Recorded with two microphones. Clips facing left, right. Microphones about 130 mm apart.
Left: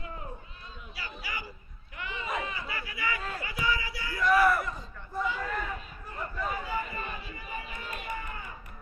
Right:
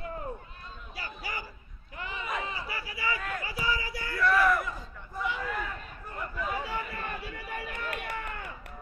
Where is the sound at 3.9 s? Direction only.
50° right (ahead or behind).